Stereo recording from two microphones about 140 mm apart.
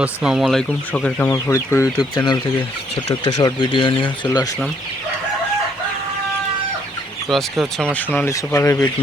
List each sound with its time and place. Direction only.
0.0 s speech: 5° right (ahead or behind)
0.9 s speech: 10° left (ahead or behind); by 4.4 s 35° left (ahead or behind)
7.3 s speech: centre (ahead or behind)
7.9 s speech: 15° left (ahead or behind)